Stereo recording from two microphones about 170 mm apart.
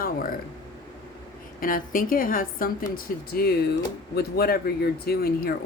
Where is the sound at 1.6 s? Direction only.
55° left (ahead or behind).